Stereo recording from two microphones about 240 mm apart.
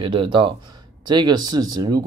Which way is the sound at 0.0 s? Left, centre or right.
Right.